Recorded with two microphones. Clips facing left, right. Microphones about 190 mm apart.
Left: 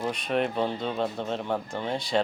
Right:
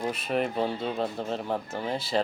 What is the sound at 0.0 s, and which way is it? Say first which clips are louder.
Speech: left 1 dB; 5° right (ahead or behind).